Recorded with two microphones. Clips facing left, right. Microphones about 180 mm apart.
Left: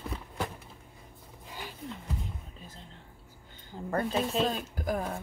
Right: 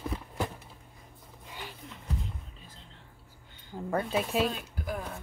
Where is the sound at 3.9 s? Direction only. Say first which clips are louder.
Even; 5° right (ahead or behind).